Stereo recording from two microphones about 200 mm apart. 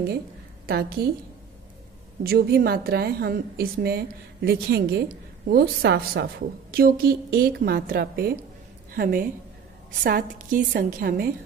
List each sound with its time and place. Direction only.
0.7 s a woman's voice: 50° right (ahead or behind)
2.2 s a woman's voice: 50° right (ahead or behind)